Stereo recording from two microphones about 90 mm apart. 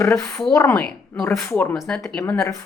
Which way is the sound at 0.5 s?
25° left (ahead or behind).